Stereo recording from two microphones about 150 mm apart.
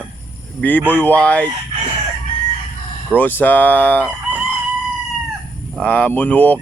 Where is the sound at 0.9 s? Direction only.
10° left (ahead or behind).